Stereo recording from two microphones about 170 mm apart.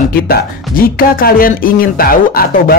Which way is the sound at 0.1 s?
60° left (ahead or behind).